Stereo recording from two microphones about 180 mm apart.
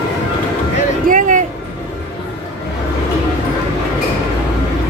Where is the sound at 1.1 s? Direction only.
45° right (ahead or behind).